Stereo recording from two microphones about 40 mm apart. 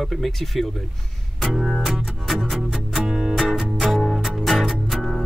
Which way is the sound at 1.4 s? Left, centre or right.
Centre.